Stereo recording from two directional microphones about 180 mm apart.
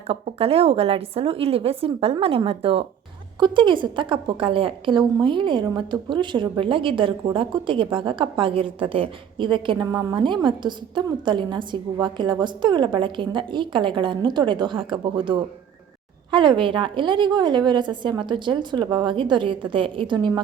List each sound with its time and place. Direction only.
0.1 s a woman's voice: 35° right (ahead or behind)